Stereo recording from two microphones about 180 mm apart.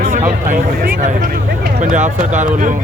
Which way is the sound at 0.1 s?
50° right (ahead or behind).